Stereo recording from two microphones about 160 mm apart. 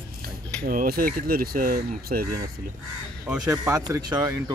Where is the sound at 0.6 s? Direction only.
65° right (ahead or behind).